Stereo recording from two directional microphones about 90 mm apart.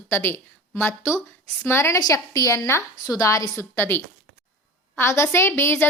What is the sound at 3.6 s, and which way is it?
A woman's voice, 25° left (ahead or behind).